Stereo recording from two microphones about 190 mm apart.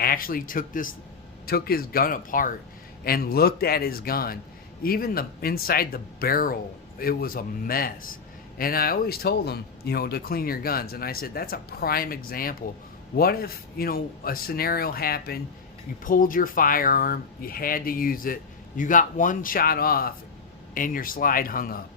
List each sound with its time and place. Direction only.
0.0 s a man's voice: 50° left (ahead or behind)